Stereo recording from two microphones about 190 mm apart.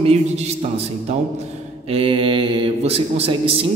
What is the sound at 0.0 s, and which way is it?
Speech, 35° right (ahead or behind).